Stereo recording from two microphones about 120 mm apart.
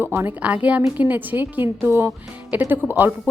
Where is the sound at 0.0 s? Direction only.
20° right (ahead or behind).